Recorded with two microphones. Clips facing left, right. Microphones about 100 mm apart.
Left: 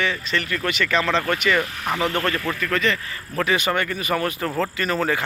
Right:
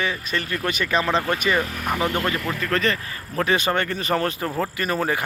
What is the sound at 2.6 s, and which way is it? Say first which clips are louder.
Speech: right 1 dB; 40° right (ahead or behind).